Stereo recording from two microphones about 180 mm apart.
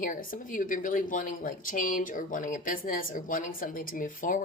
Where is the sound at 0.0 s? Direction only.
50° left (ahead or behind).